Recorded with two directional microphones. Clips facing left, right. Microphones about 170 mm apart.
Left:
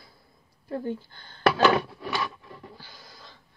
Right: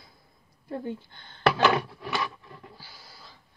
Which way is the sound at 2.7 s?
10° right (ahead or behind).